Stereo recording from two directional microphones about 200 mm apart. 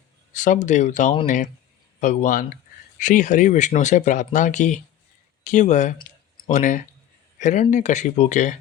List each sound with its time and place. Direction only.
0.3 s speech: 40° left (ahead or behind)